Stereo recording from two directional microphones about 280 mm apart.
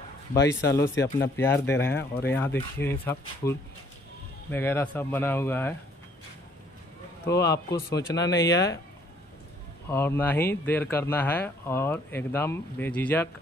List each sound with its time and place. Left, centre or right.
0.5 s speech: centre
7.2 s speech: centre
9.8 s speech: centre